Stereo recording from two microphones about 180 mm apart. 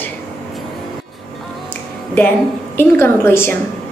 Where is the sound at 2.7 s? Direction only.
15° left (ahead or behind).